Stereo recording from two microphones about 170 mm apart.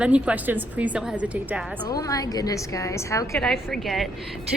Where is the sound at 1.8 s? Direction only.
20° left (ahead or behind).